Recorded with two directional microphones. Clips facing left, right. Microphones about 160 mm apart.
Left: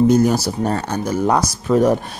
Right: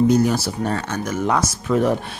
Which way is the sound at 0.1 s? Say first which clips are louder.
Left 3 dB; 45° left (ahead or behind).